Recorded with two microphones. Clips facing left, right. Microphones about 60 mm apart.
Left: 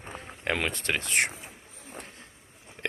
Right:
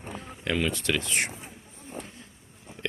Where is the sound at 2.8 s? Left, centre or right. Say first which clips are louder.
Even; left.